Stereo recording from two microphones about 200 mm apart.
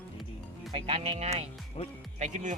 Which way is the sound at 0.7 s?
30° right (ahead or behind).